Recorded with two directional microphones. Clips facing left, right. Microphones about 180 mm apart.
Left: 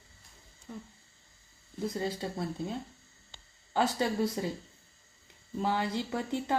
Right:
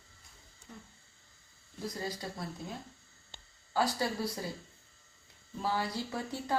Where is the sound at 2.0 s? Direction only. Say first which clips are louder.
Left 5 dB; 25° left (ahead or behind).